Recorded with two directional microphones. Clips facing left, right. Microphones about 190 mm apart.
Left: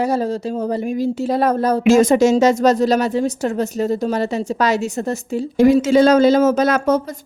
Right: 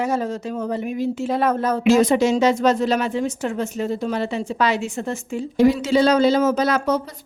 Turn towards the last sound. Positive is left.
turn(degrees=50)  # may be behind; listen again after turning